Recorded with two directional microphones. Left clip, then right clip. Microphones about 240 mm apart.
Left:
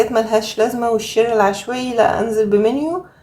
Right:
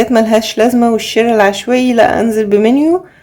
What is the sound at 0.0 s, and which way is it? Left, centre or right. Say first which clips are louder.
Speech: right 5 dB; right.